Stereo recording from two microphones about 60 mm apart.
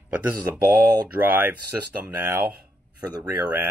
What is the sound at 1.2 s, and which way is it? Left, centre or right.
Speech, right.